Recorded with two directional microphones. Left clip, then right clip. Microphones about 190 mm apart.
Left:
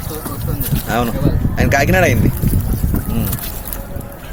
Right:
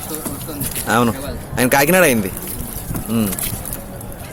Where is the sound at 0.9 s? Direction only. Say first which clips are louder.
Right 1 dB; 30° right (ahead or behind).